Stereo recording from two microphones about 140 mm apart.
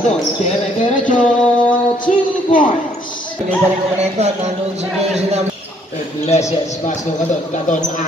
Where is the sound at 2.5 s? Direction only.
75° left (ahead or behind).